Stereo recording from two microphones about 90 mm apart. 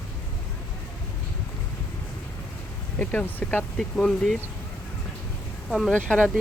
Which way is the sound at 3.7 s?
5° left (ahead or behind).